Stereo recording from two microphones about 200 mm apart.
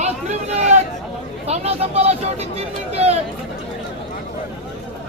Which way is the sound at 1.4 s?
30° right (ahead or behind).